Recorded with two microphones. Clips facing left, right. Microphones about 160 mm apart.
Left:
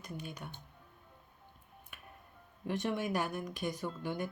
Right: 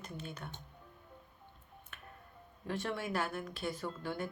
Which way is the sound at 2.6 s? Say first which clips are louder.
Left 3 dB; 20° left (ahead or behind).